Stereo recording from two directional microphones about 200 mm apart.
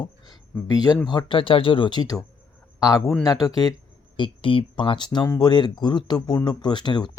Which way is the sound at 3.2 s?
20° left (ahead or behind).